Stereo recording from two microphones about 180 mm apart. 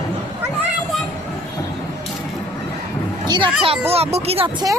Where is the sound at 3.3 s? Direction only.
25° right (ahead or behind).